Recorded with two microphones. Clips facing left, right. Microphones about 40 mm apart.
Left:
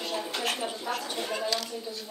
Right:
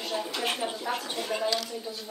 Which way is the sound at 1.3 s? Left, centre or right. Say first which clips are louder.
Right 3 dB; centre.